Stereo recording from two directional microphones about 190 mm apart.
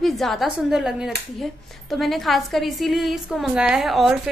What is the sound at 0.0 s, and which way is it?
Speech, centre (ahead or behind).